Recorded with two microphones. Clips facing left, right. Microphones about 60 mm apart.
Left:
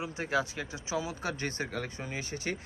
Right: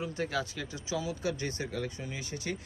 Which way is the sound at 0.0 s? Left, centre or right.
Left.